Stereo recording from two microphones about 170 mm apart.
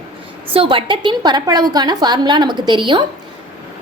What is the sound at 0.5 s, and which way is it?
A woman's voice, 30° right (ahead or behind).